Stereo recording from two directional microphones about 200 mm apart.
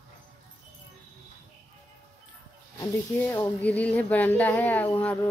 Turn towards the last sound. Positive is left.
turn(degrees=10)  # may be behind; listen again after turning